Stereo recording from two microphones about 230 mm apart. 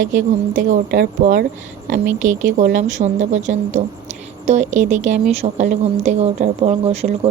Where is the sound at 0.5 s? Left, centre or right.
Right.